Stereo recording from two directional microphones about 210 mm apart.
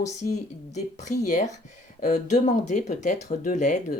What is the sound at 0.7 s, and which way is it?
Speech, 35° left (ahead or behind).